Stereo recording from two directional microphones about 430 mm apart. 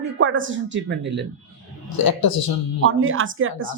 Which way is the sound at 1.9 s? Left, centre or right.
Left.